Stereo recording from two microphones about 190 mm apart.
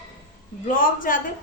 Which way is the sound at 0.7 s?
45° left (ahead or behind).